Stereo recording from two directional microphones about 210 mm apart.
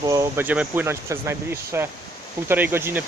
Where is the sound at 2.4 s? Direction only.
10° right (ahead or behind).